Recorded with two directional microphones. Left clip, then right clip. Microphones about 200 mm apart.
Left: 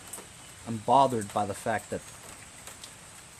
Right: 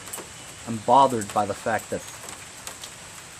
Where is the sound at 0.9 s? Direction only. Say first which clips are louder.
Right 5 dB; 35° left (ahead or behind).